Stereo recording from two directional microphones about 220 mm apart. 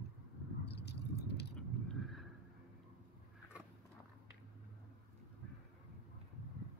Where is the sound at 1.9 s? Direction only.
Centre (ahead or behind).